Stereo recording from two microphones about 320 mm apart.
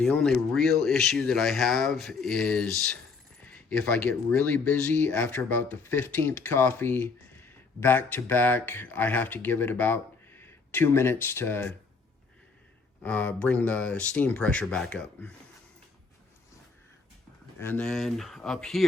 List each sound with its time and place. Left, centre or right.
0.0 s speech: centre
13.0 s speech: centre
17.6 s speech: centre